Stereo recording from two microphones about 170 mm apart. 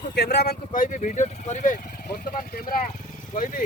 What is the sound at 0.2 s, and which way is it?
Speech, 75° left (ahead or behind).